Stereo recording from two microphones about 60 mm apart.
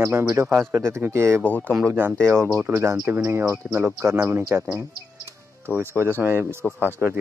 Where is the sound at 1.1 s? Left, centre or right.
Right.